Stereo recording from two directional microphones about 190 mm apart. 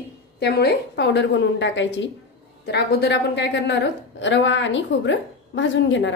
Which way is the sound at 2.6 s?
60° left (ahead or behind).